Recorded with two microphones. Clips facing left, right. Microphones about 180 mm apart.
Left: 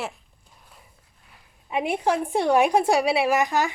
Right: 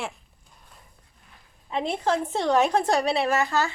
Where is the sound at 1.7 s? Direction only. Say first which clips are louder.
Left 2 dB; 10° left (ahead or behind).